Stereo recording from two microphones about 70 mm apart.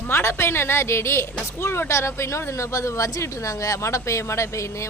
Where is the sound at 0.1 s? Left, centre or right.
Left.